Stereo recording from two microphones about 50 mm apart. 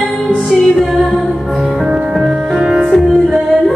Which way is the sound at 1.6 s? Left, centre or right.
Centre.